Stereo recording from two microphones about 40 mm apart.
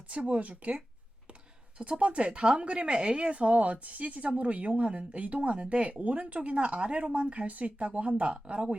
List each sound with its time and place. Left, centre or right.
0.1 s speech: right
1.8 s speech: right